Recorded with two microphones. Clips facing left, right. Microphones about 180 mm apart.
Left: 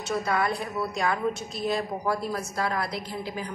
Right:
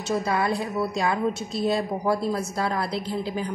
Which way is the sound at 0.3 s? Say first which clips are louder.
Right 2 dB; 25° right (ahead or behind).